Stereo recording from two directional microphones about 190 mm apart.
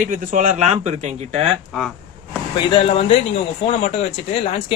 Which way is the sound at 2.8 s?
30° left (ahead or behind).